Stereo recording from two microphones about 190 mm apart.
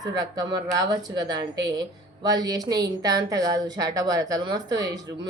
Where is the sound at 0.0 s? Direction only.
20° right (ahead or behind).